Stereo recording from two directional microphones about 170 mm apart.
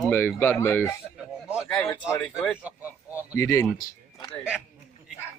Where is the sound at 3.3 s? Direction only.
15° left (ahead or behind).